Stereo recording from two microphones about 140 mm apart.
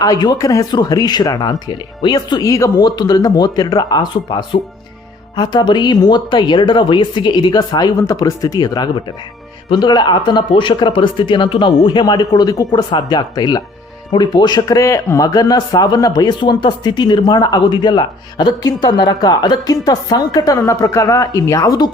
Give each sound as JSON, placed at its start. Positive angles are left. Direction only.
{"t": 0.0, "sound": "speech", "side_deg": 30}